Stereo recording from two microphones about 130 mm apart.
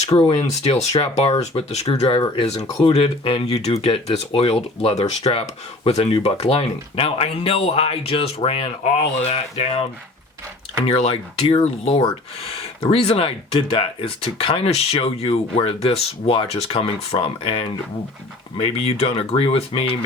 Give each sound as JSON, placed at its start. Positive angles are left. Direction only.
{"t": 0.0, "sound": "speech", "side_deg": 50}
{"t": 2.0, "sound": "speech", "side_deg": 40}
{"t": 10.8, "sound": "speech", "side_deg": 50}